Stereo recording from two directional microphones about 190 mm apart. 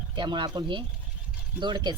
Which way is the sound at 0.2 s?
25° right (ahead or behind).